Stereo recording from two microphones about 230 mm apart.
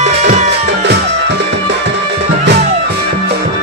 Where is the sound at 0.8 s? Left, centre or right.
Right.